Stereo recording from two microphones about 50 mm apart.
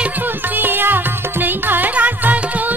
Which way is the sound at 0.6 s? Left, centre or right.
Right.